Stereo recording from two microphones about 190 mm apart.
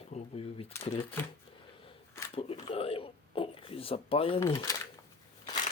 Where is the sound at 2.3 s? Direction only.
30° left (ahead or behind).